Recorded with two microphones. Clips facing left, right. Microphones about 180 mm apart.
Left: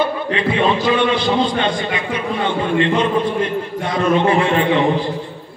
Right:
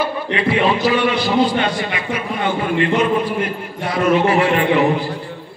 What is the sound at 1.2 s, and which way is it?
Speech, 5° right (ahead or behind).